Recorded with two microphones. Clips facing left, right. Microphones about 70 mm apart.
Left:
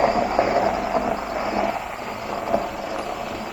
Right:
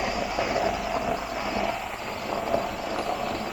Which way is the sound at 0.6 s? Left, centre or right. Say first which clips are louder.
Left 5 dB; centre.